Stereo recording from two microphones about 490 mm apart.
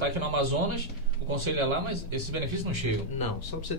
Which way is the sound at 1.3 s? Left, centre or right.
Right.